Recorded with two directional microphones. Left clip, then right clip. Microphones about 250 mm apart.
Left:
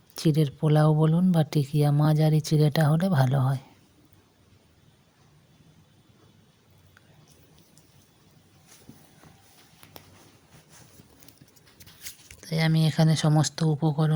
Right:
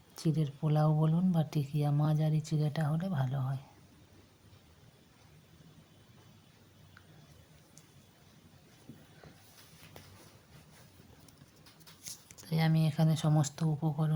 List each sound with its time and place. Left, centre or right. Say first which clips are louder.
0.2 s speech: left 11 dB; left
12.5 s speech: left 7 dB; left